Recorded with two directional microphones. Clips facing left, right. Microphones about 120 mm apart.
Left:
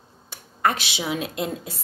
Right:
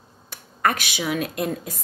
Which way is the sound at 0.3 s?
25° left (ahead or behind).